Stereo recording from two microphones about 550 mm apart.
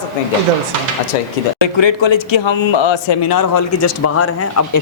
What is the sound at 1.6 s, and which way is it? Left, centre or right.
A man's voice, left.